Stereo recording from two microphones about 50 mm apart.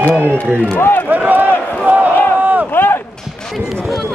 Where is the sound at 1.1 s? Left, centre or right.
Right.